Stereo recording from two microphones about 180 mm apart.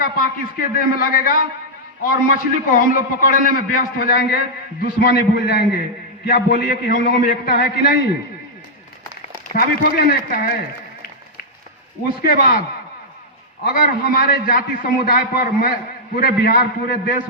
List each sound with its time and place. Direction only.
0.0 s a man's voice: 50° left (ahead or behind)
9.6 s a man's voice: 50° left (ahead or behind)
12.2 s a man's voice: 50° left (ahead or behind)
13.7 s a man's voice: 50° left (ahead or behind)